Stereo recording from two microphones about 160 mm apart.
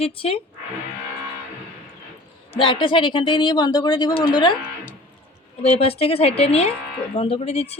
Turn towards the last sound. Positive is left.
turn(degrees=40)  # may be behind; listen again after turning